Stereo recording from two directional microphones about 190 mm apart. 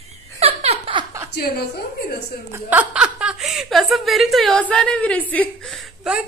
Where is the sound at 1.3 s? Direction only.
55° left (ahead or behind).